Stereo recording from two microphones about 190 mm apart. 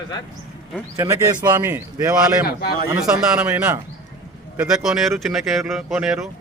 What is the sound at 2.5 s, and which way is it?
Speech, 55° left (ahead or behind).